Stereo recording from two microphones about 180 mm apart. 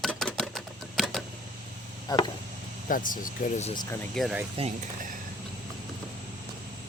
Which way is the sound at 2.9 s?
50° left (ahead or behind).